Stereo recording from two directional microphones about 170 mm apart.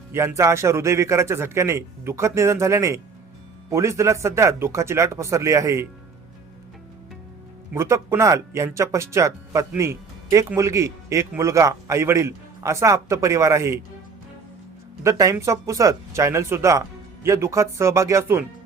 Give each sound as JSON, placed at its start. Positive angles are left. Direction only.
{"t": 0.1, "sound": "speech", "side_deg": -15}
{"t": 7.7, "sound": "speech", "side_deg": -15}
{"t": 15.0, "sound": "speech", "side_deg": -20}